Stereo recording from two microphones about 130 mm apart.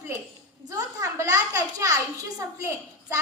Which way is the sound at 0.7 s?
25° right (ahead or behind).